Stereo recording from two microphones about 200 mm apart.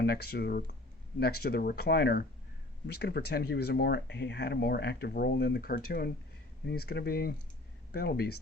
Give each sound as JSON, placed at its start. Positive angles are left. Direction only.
{"t": 0.0, "sound": "speech", "side_deg": 50}